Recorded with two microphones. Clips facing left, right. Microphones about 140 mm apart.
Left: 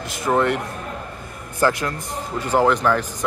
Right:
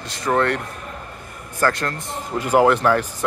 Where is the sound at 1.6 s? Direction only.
5° left (ahead or behind).